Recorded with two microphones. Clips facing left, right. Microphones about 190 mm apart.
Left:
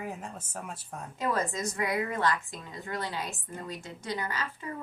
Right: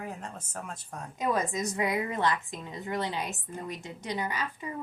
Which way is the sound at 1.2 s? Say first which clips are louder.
Right 1 dB; 15° right (ahead or behind).